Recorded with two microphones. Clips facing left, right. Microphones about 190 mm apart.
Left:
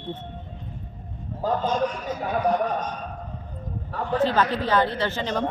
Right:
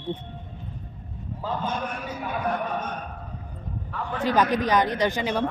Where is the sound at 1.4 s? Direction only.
40° left (ahead or behind).